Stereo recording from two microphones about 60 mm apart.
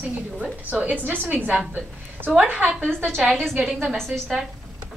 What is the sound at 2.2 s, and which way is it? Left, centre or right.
Speech, right.